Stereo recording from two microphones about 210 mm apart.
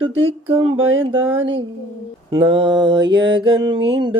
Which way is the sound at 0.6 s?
70° right (ahead or behind).